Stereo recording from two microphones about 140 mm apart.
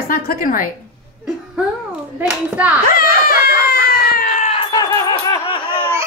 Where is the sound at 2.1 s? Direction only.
10° right (ahead or behind).